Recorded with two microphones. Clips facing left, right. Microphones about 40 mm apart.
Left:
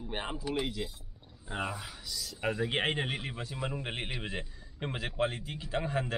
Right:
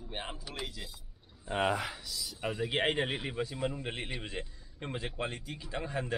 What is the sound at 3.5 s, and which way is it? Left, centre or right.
Speech, centre.